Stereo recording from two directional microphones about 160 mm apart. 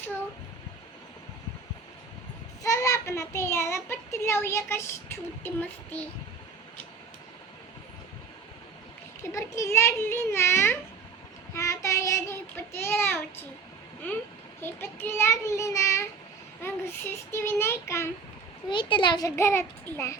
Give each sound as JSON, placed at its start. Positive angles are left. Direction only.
{"t": 2.6, "sound": "a child's voice", "side_deg": 20}
{"t": 9.3, "sound": "a child's voice", "side_deg": 20}
{"t": 18.7, "sound": "a child's voice", "side_deg": 30}